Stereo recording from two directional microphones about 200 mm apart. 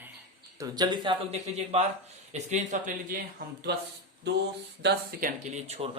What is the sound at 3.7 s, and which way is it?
A man's voice, 55° right (ahead or behind).